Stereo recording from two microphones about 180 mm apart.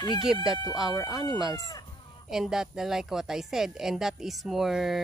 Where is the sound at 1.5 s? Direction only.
20° left (ahead or behind).